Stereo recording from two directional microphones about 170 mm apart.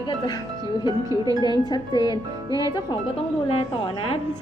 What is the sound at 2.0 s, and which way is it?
Music, 20° right (ahead or behind).